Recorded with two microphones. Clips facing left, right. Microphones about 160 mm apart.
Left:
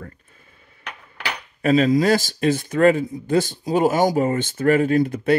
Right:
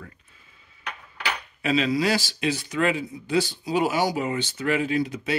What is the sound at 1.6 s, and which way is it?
Speech, 50° left (ahead or behind).